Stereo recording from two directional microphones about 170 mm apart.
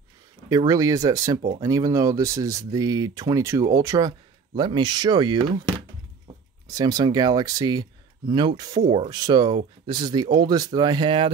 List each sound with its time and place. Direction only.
0.5 s speech: 20° right (ahead or behind)
6.7 s speech: 20° right (ahead or behind)